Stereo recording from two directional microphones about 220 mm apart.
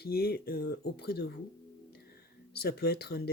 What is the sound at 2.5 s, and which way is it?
Speech, 45° left (ahead or behind).